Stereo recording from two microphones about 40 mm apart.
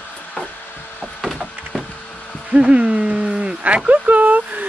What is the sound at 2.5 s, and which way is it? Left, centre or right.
Speech, right.